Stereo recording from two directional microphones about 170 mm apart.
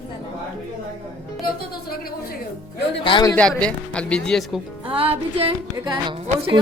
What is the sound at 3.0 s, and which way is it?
Speech, 30° left (ahead or behind).